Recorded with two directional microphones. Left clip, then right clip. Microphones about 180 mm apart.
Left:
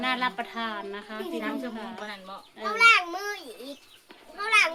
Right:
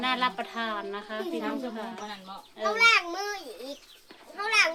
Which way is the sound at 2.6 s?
25° left (ahead or behind).